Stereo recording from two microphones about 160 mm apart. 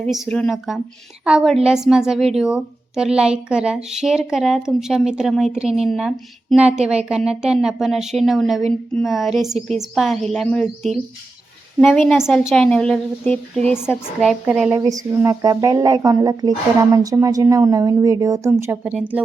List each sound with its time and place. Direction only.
0.1 s a woman's voice: 5° left (ahead or behind)
14.7 s a woman's voice: 20° right (ahead or behind)